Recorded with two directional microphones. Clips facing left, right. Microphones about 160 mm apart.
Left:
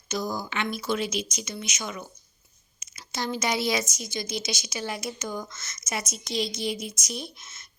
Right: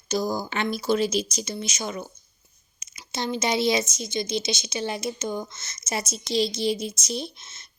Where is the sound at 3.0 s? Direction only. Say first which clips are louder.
Right 2 dB; 20° right (ahead or behind).